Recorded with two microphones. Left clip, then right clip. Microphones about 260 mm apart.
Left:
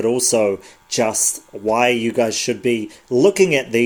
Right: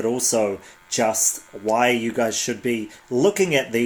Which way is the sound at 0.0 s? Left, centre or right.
Left.